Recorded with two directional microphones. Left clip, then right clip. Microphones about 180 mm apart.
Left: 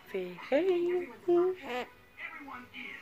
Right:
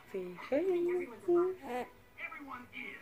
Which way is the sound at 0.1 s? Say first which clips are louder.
Left 4 dB; 10° left (ahead or behind).